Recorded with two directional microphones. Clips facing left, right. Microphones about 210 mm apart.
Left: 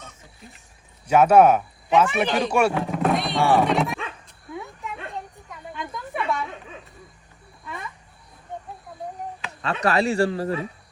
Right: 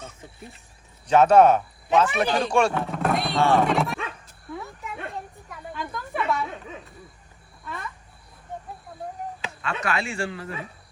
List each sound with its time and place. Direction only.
1.0 s speech: 10° left (ahead or behind)
5.7 s a sound: centre (ahead or behind)
9.6 s speech: 35° left (ahead or behind)